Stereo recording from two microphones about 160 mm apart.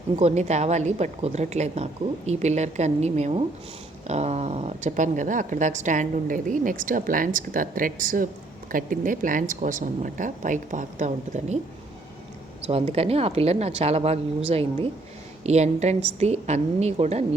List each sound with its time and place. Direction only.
0.2 s speech: 45° right (ahead or behind)
12.6 s speech: 40° right (ahead or behind)